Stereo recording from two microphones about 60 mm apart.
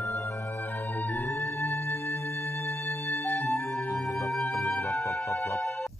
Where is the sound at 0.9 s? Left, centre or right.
Left.